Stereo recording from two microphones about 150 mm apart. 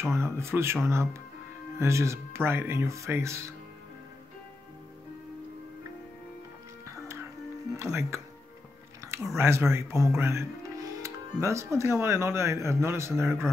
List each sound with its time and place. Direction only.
0.1 s speech: 15° right (ahead or behind)
1.8 s speech: 20° right (ahead or behind)
7.7 s speech: 15° right (ahead or behind)
9.0 s a sound: 20° right (ahead or behind)
9.4 s speech: 15° right (ahead or behind)